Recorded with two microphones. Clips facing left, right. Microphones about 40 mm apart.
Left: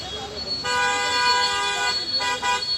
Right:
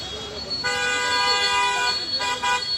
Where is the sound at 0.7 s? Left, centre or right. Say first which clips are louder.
Left 3 dB; left.